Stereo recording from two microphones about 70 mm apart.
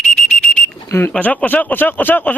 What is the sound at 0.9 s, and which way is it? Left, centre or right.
Speech, left.